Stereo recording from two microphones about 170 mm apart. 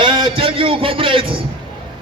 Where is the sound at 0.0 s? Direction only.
30° right (ahead or behind).